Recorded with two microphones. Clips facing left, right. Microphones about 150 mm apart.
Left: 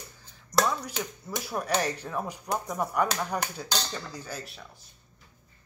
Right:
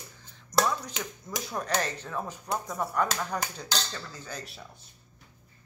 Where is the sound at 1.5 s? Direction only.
10° left (ahead or behind).